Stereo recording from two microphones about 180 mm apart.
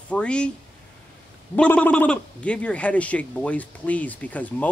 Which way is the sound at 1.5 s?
10° left (ahead or behind).